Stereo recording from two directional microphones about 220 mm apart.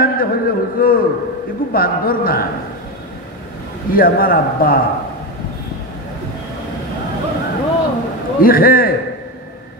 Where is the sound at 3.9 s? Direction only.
40° left (ahead or behind).